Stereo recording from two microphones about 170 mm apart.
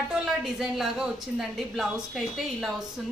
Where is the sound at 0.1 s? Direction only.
Centre (ahead or behind).